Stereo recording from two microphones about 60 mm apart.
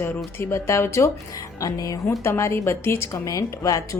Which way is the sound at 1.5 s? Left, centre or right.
Left.